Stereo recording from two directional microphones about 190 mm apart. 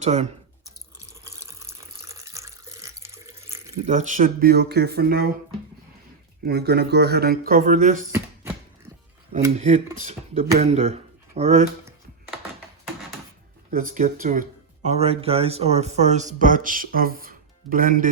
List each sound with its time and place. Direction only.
0.0 s speech: 35° right (ahead or behind)
0.9 s water: 15° right (ahead or behind)
3.8 s speech: 40° right (ahead or behind)
6.4 s speech: 55° right (ahead or behind)
8.1 s a sound: 15° right (ahead or behind)
9.3 s speech: 40° right (ahead or behind)
13.7 s speech: 45° right (ahead or behind)
14.8 s speech: 30° right (ahead or behind)